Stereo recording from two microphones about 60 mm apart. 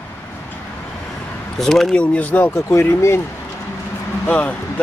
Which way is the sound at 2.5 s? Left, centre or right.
Left.